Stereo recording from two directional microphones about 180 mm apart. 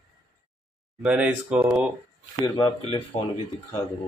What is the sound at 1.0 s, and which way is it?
Speech, 5° right (ahead or behind).